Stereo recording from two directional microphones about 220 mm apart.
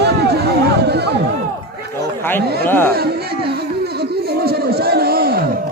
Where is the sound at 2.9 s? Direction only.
45° right (ahead or behind).